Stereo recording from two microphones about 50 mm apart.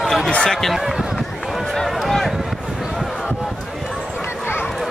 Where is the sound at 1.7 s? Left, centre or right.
Centre.